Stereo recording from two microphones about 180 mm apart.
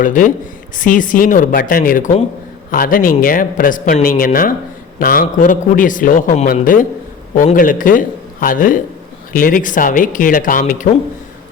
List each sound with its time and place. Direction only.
0.0 s a man's voice: 45° left (ahead or behind)